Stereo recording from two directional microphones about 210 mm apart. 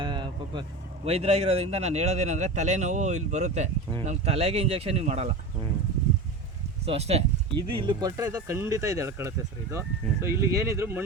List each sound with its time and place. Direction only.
0.0 s vehicle: 20° right (ahead or behind)
1.0 s speech: 30° right (ahead or behind)
6.8 s speech: 30° right (ahead or behind); by 11.0 s 10° right (ahead or behind)